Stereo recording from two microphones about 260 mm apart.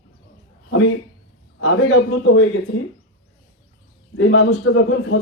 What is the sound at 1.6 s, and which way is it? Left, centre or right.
Speech, left.